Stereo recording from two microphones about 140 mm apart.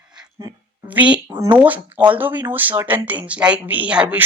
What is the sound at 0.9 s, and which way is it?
Speech, 10° right (ahead or behind).